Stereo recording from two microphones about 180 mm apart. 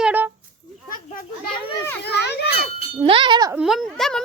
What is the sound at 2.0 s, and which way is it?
Speech, 65° left (ahead or behind).